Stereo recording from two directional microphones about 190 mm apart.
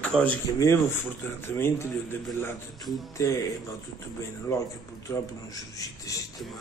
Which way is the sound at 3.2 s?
15° left (ahead or behind).